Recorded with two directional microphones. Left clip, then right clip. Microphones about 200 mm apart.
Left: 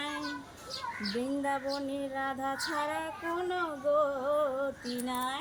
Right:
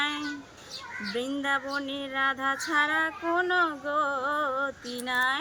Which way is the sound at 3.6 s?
40° right (ahead or behind).